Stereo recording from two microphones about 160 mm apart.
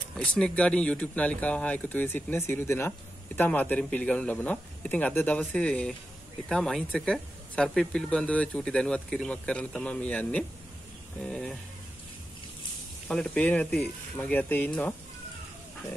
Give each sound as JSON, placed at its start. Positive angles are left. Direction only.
{"t": 0.1, "sound": "speech", "side_deg": 5}
{"t": 13.1, "sound": "speech", "side_deg": 5}